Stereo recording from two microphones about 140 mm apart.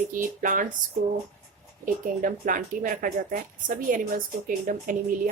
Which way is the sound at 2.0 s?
70° right (ahead or behind).